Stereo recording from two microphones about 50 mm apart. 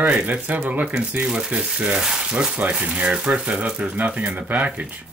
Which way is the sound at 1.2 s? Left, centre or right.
Centre.